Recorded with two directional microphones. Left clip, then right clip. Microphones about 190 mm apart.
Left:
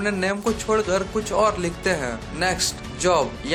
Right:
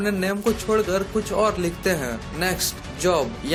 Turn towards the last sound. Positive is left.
turn(degrees=-40)  # may be behind; listen again after turning